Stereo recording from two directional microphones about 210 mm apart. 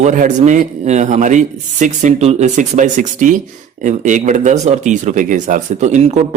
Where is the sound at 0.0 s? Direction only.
35° right (ahead or behind).